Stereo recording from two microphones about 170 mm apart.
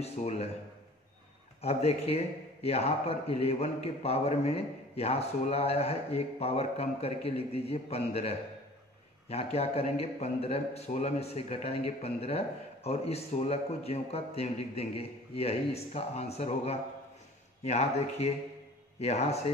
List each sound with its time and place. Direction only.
0.0 s a man's voice: 40° left (ahead or behind)
1.6 s a man's voice: 40° left (ahead or behind)